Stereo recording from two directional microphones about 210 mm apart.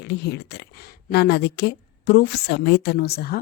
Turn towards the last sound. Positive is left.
turn(degrees=45)  # may be behind; listen again after turning